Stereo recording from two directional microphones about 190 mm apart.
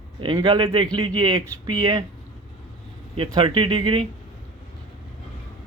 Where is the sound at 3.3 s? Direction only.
25° right (ahead or behind).